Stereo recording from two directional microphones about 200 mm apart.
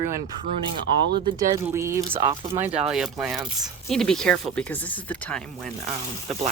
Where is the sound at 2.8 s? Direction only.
Centre (ahead or behind).